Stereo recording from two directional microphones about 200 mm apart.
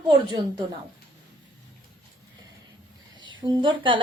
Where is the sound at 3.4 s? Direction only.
25° right (ahead or behind).